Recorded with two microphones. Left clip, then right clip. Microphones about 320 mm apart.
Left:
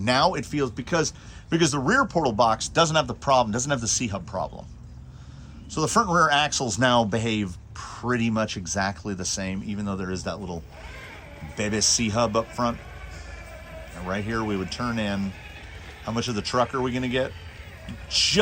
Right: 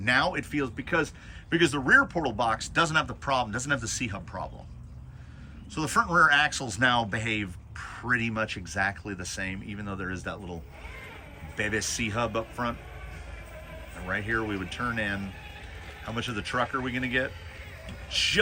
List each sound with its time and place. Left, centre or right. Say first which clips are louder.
0.0 s speech: left 3 dB; centre
5.7 s speech: left 3 dB; centre
11.5 s speech: left 5 dB; centre
14.1 s speech: left 1 dB; centre
16.1 s speech: left 5 dB; centre